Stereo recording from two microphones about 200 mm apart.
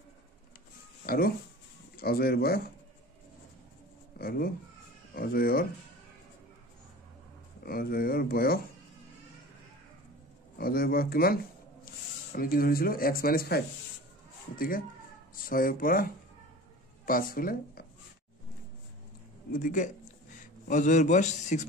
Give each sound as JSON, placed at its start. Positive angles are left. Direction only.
{"t": 1.0, "sound": "a sound", "side_deg": 50}
{"t": 2.0, "sound": "speech", "side_deg": 50}
{"t": 4.2, "sound": "speech", "side_deg": 50}
{"t": 7.6, "sound": "speech", "side_deg": 50}
{"t": 10.6, "sound": "speech", "side_deg": 50}
{"t": 15.3, "sound": "speech", "side_deg": 45}
{"t": 19.5, "sound": "a man's voice", "side_deg": 40}